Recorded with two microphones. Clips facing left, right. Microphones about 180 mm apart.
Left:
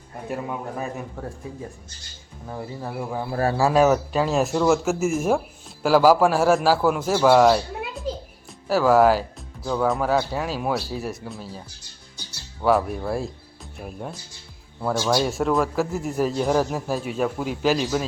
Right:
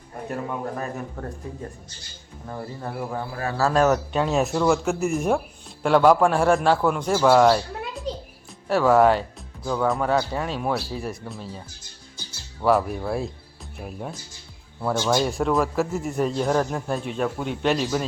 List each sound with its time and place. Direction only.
0.8 s speech: 5° left (ahead or behind)
2.5 s speech: 5° left (ahead or behind)
3.3 s speech: 35° left (ahead or behind)
3.6 s speech: 5° left (ahead or behind)
12.6 s speech: centre (ahead or behind)